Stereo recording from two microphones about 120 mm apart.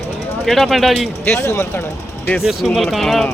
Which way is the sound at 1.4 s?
25° left (ahead or behind).